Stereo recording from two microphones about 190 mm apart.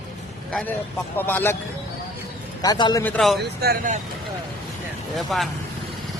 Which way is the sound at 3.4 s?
55° right (ahead or behind).